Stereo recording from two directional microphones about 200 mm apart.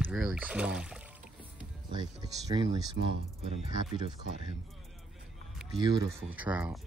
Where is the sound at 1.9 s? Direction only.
20° right (ahead or behind).